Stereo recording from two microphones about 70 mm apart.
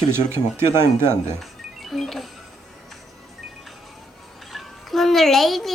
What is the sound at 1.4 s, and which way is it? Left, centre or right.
Music, centre.